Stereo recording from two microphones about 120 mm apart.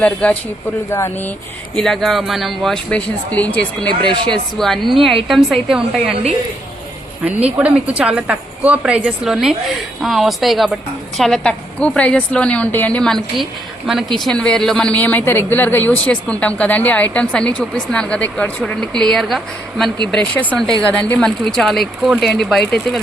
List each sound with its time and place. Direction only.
0.0 s speech: 10° left (ahead or behind)
0.9 s speech: 20° left (ahead or behind)
1.7 s speech: 5° left (ahead or behind)
7.3 s a woman's voice: 10° right (ahead or behind)